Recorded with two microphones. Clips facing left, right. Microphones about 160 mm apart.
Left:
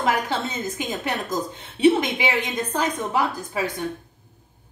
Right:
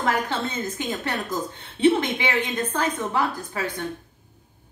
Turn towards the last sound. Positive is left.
turn(degrees=15)  # may be behind; listen again after turning